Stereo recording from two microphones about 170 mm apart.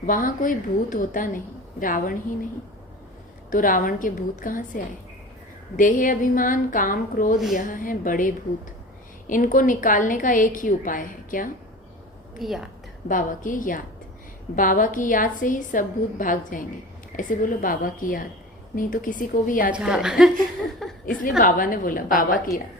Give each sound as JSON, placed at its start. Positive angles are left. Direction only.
{"t": 0.0, "sound": "a woman's voice", "side_deg": 50}
{"t": 3.5, "sound": "a woman's voice", "side_deg": 55}
{"t": 12.4, "sound": "a woman's voice", "side_deg": 0}
{"t": 13.1, "sound": "a woman's voice", "side_deg": 50}
{"t": 19.7, "sound": "a woman's voice", "side_deg": -5}
{"t": 21.2, "sound": "a woman's voice", "side_deg": 55}